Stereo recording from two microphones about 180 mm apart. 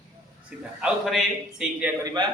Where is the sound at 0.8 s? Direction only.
Centre (ahead or behind).